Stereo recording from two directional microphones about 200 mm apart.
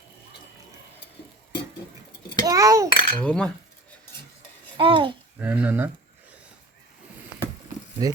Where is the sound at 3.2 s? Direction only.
5° left (ahead or behind).